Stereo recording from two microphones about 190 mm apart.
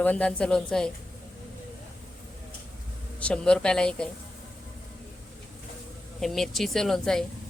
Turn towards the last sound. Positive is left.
turn(degrees=0)  # may be behind; listen again after turning